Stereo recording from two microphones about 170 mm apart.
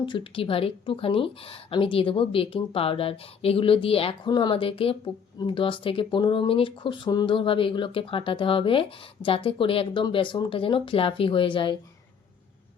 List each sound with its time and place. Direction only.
0.0 s speech: 30° left (ahead or behind)